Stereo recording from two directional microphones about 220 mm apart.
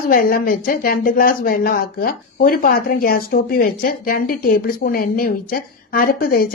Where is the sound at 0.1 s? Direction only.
40° left (ahead or behind).